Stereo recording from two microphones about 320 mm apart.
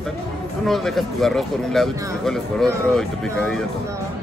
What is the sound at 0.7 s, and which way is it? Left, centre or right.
Speech, centre.